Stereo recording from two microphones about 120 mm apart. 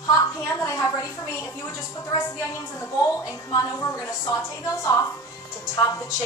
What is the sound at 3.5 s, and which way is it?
Speech, 30° left (ahead or behind).